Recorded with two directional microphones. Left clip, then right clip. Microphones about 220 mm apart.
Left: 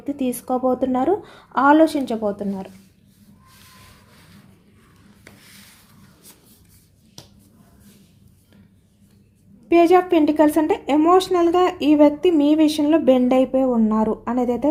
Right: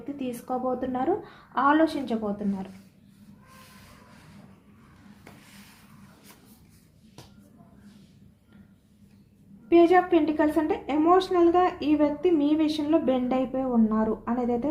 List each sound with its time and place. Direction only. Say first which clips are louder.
0.0 s a woman's voice: left 9 dB; 55° left (ahead or behind)
9.6 s a woman's voice: left 5 dB; 55° left (ahead or behind)